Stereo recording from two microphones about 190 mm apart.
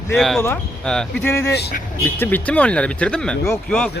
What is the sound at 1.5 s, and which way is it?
Speech, 60° left (ahead or behind).